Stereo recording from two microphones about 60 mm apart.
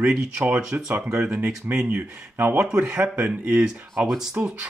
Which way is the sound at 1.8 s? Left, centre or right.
Right.